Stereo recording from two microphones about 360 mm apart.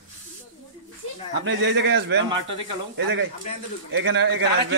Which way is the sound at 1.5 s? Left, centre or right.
Right.